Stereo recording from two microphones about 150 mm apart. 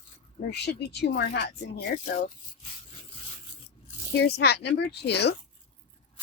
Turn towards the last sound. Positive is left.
turn(degrees=90)